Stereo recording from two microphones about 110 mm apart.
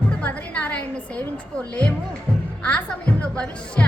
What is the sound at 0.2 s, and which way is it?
A woman's voice, 15° left (ahead or behind).